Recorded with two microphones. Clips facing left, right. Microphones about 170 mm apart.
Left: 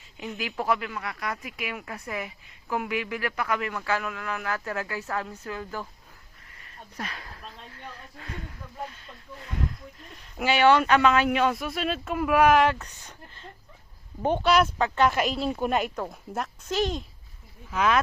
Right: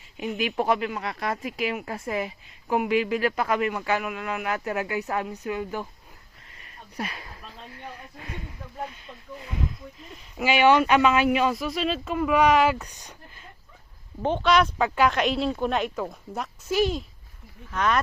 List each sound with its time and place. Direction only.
0.2 s speech: 20° right (ahead or behind)
6.9 s speech: 10° right (ahead or behind)
7.7 s a sound: 15° right (ahead or behind)
10.4 s speech: 10° right (ahead or behind)
12.8 s speech: 10° right (ahead or behind)
14.2 s speech: 10° left (ahead or behind)
14.8 s speech: 10° right (ahead or behind)
15.1 s speech: 5° left (ahead or behind)